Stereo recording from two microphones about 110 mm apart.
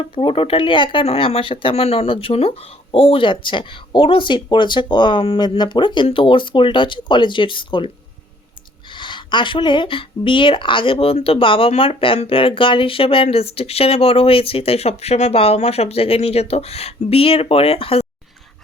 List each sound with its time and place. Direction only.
0.2 s speech: 55° left (ahead or behind)
1.0 s speech: 65° left (ahead or behind); by 1.7 s 50° left (ahead or behind)
1.7 s speech: 70° left (ahead or behind); by 7.9 s 50° left (ahead or behind)
8.9 s speech: 45° left (ahead or behind)